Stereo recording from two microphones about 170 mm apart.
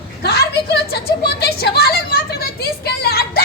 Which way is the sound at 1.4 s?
70° left (ahead or behind).